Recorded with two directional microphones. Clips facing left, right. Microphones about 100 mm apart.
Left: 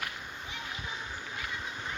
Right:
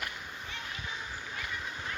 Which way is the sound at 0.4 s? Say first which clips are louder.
Left 1 dB; 10° left (ahead or behind).